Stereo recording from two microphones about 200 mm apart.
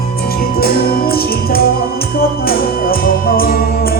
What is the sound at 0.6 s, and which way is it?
Music, 50° left (ahead or behind).